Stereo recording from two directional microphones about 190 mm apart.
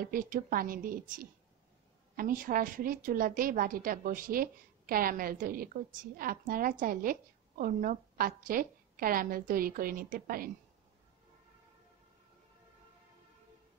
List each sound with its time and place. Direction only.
0.0 s a woman's voice: 50° right (ahead or behind)